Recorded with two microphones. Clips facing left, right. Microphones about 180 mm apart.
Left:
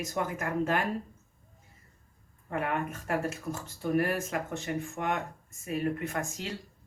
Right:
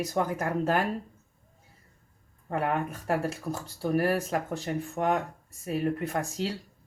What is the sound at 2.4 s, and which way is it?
Speech, 35° right (ahead or behind).